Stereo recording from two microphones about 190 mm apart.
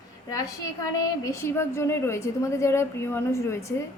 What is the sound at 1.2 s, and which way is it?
A woman's voice, 15° left (ahead or behind).